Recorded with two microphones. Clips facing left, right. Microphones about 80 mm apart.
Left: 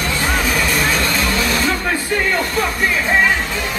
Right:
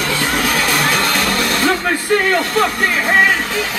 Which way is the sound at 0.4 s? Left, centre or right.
Right.